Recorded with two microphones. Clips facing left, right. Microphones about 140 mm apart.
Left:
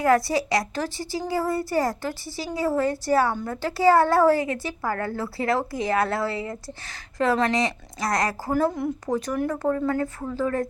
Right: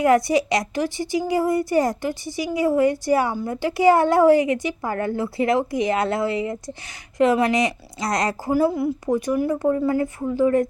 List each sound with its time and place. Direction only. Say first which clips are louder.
0.0 s a woman's voice: right 3 dB; 20° right (ahead or behind)
8.5 s a woman's voice: right 4 dB; 5° right (ahead or behind)